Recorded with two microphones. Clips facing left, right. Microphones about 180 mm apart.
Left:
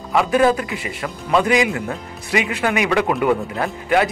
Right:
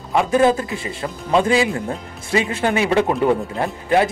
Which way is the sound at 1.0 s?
25° right (ahead or behind).